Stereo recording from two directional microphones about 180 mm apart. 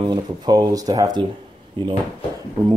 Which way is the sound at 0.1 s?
25° right (ahead or behind).